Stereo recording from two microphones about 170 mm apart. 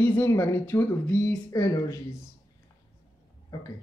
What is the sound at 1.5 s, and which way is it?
Speech, 20° left (ahead or behind).